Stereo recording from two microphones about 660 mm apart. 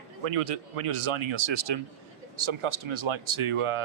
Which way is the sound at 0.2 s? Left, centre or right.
Right.